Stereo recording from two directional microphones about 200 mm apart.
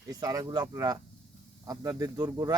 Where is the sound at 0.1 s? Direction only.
15° right (ahead or behind).